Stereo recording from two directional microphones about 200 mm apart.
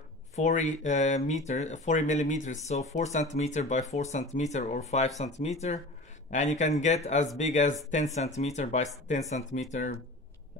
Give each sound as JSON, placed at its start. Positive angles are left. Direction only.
{"t": 0.4, "sound": "speech", "side_deg": 35}